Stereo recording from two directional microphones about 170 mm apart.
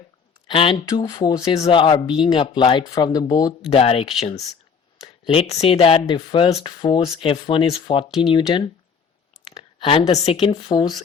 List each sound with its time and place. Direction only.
0.4 s speech: 30° left (ahead or behind)
1.0 s speech: 20° left (ahead or behind)
3.7 s speech: 35° left (ahead or behind)
10.1 s speech: 40° left (ahead or behind)